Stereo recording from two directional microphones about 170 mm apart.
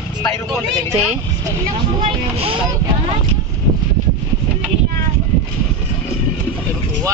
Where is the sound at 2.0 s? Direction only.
30° right (ahead or behind).